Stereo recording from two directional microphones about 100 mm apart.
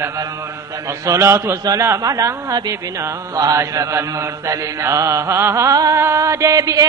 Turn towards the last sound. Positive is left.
turn(degrees=-35)  # may be behind; listen again after turning